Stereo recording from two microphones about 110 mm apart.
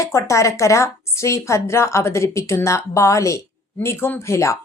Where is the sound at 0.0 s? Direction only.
25° left (ahead or behind).